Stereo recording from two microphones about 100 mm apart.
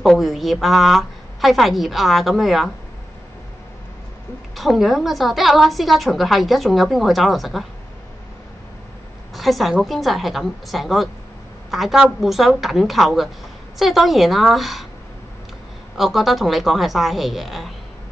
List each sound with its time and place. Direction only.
0.0 s a woman's voice: centre (ahead or behind)
4.6 s a woman's voice: centre (ahead or behind)
9.3 s a woman's voice: centre (ahead or behind)
16.0 s a woman's voice: centre (ahead or behind)